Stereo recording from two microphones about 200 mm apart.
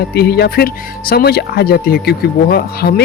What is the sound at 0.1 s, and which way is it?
Speech, 50° left (ahead or behind).